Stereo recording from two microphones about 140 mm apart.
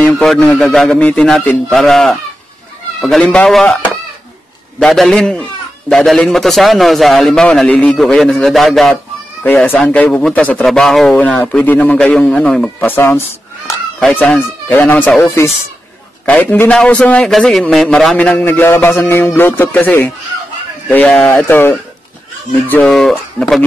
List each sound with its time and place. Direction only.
0.2 s a man's voice: 5° left (ahead or behind)
9.4 s a man's voice: 15° left (ahead or behind)
12.9 s a man's voice: 15° left (ahead or behind)
22.8 s a man's voice: centre (ahead or behind)